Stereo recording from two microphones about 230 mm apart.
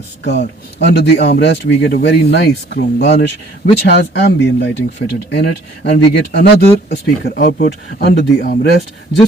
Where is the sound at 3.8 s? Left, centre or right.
Left.